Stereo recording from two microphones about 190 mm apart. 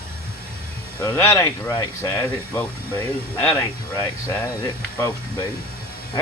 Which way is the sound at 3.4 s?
10° left (ahead or behind).